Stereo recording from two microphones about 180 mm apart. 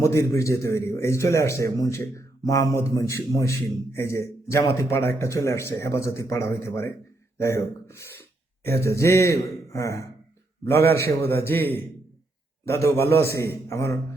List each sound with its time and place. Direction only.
0.0 s a man's voice: 15° left (ahead or behind)
11.1 s a man's voice: 10° left (ahead or behind)